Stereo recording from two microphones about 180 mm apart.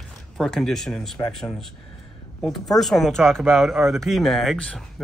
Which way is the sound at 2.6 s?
Centre (ahead or behind).